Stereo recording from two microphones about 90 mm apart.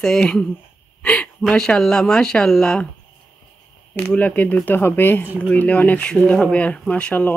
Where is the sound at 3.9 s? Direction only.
20° left (ahead or behind).